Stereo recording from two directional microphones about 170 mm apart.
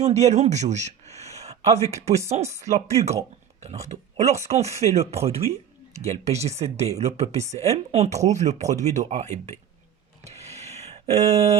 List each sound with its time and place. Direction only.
0.0 s speech: 40° right (ahead or behind)
10.2 s a sound: 40° right (ahead or behind)
11.1 s speech: 40° right (ahead or behind)